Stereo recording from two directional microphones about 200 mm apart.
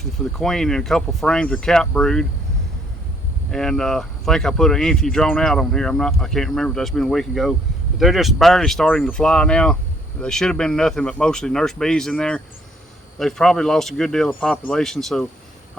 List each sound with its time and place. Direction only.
0.0 s speech: centre (ahead or behind)
3.5 s speech: 5° left (ahead or behind)